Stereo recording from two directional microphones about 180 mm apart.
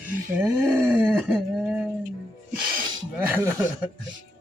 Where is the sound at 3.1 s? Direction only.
15° right (ahead or behind).